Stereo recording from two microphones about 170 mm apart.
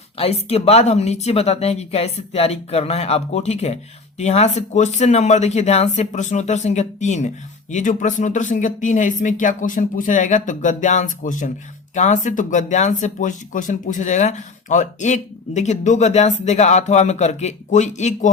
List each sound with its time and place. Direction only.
0.2 s speech: 35° left (ahead or behind)